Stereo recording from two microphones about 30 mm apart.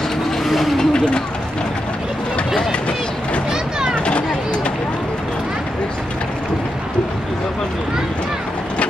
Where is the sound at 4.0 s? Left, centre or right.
Left.